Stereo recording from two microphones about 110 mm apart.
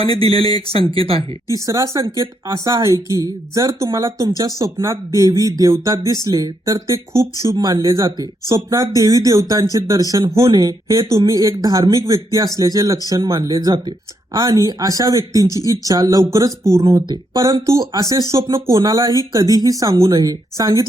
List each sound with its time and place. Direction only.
0.0 s speech: 60° right (ahead or behind)
1.6 s speech: 30° right (ahead or behind)